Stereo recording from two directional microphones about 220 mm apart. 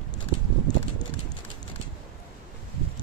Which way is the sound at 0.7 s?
20° left (ahead or behind).